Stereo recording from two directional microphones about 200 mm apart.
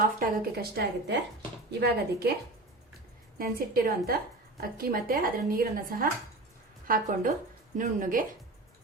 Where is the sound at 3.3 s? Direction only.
45° right (ahead or behind).